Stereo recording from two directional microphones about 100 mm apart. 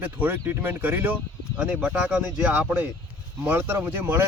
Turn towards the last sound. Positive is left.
turn(degrees=-25)  # may be behind; listen again after turning